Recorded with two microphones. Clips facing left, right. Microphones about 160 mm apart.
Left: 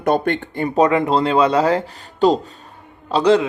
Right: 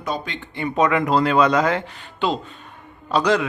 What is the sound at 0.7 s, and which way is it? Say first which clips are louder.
Speech: left 3 dB; 35° left (ahead or behind).